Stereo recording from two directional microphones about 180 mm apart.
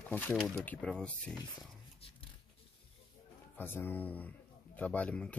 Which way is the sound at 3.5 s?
10° left (ahead or behind).